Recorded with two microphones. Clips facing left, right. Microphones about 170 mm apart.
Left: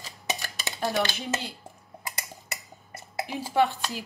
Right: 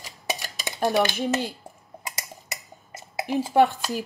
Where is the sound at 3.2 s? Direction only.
45° right (ahead or behind).